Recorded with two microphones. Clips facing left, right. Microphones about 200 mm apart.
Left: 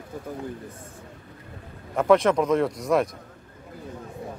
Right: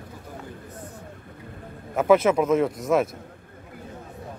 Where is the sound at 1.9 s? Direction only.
5° right (ahead or behind).